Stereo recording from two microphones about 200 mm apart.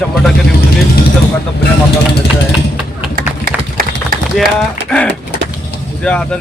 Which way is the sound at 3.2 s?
45° right (ahead or behind).